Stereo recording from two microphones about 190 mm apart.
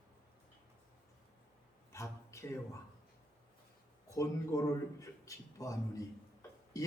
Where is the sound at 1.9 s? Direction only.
15° left (ahead or behind).